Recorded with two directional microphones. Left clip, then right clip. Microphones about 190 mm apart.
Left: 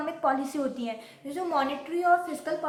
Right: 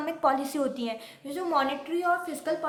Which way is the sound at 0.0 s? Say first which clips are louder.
Right 1 dB; 30° right (ahead or behind).